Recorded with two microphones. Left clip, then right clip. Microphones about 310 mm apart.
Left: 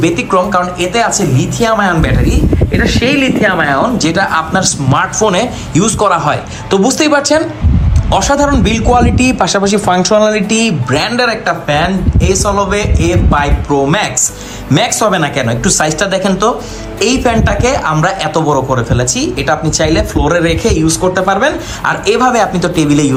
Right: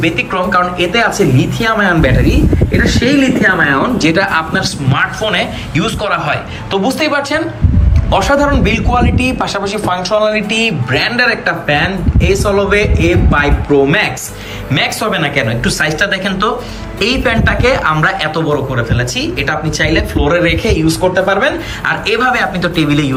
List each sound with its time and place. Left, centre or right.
0.0 s speech: centre